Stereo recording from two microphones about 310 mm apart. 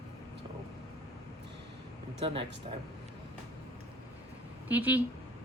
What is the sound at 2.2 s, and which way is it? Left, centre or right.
Speech, centre.